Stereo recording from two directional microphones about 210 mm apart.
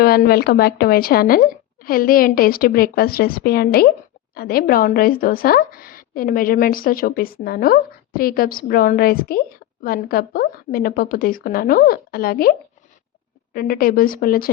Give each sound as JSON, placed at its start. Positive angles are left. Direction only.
{"t": 0.0, "sound": "a woman's voice", "side_deg": 45}